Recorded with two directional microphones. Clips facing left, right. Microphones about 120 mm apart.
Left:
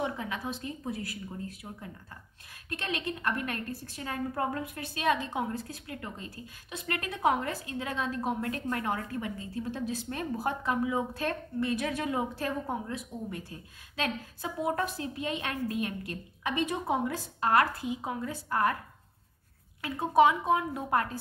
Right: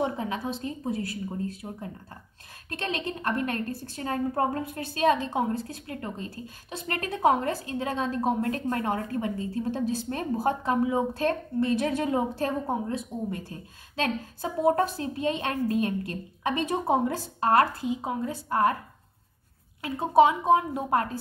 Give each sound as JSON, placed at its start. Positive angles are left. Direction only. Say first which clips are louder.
{"t": 0.0, "sound": "a woman's voice", "louder": "right 5 dB", "side_deg": -30}
{"t": 19.8, "sound": "speech", "louder": "right 3 dB", "side_deg": -25}